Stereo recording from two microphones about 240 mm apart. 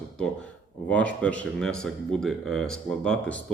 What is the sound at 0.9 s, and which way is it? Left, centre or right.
Speech, centre.